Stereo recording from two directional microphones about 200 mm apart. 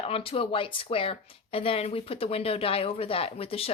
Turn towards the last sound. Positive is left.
turn(degrees=30)  # may be behind; listen again after turning